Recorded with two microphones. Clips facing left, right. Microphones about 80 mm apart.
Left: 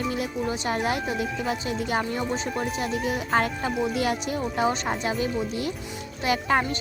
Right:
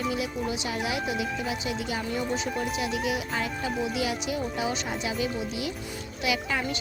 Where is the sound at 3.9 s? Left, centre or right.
Left.